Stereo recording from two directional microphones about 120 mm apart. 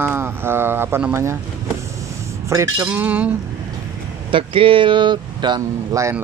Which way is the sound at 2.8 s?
15° right (ahead or behind).